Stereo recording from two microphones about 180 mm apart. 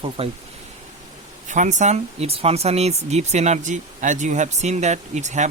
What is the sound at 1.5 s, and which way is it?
Speech, 45° right (ahead or behind).